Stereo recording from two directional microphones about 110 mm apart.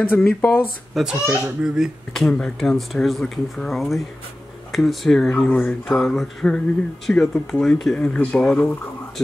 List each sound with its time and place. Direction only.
0.0 s speech: 20° left (ahead or behind)
0.9 s a child's voice: 5° right (ahead or behind)